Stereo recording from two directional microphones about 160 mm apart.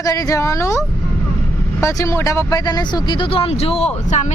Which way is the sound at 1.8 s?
20° left (ahead or behind).